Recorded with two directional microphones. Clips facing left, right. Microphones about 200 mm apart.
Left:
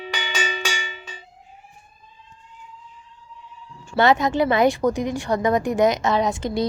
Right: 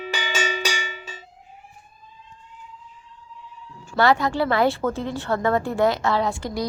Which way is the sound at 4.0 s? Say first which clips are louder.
Left 2 dB; 20° left (ahead or behind).